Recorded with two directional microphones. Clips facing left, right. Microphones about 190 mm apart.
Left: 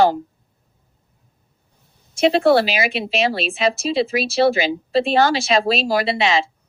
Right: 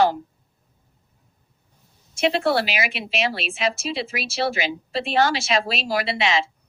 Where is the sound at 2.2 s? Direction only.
35° left (ahead or behind).